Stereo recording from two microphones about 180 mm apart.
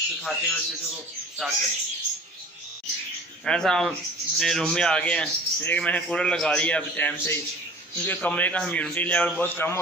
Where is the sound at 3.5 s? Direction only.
5° left (ahead or behind).